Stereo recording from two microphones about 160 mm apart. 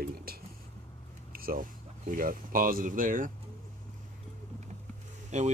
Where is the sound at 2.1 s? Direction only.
60° right (ahead or behind).